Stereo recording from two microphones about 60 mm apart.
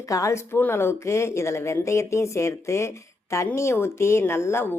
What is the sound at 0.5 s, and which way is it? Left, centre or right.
A woman's voice, left.